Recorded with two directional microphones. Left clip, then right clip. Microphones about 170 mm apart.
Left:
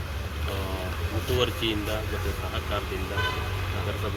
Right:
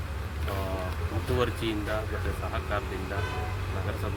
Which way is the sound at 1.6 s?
60° right (ahead or behind).